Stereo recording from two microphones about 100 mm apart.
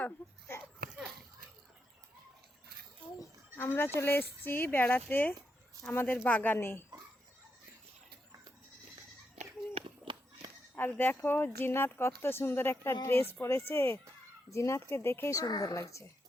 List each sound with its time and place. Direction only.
0.0 s speech: 20° left (ahead or behind)
3.5 s speech: 20° left (ahead or behind)
9.8 s run: 75° right (ahead or behind)
10.8 s speech: 20° left (ahead or behind)